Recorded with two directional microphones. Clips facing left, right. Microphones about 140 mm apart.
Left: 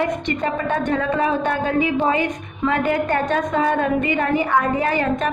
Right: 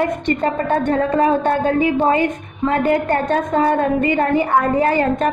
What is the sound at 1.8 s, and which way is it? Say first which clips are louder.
A woman's voice: right 3 dB; 45° right (ahead or behind).